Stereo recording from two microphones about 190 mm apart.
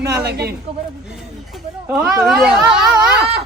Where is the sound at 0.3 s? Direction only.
60° right (ahead or behind).